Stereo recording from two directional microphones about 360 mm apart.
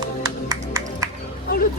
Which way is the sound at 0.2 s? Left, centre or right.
Centre.